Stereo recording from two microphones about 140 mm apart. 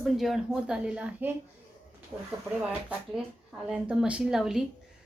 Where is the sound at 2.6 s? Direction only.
10° right (ahead or behind).